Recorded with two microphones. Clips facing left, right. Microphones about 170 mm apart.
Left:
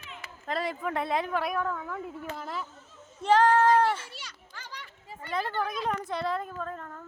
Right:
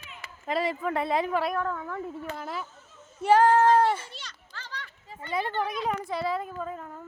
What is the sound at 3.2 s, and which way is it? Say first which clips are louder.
Child singing: right 2 dB; 10° right (ahead or behind).